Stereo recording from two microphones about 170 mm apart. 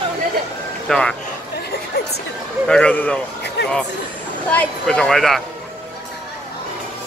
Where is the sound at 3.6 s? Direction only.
80° left.